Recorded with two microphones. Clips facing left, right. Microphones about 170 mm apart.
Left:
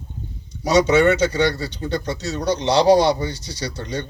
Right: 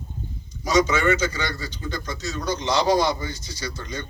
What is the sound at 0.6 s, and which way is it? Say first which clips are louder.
A man's voice: left 5 dB; 70° left (ahead or behind).